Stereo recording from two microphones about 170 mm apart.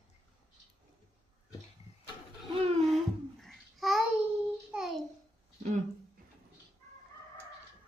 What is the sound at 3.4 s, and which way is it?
Babbling, centre (ahead or behind).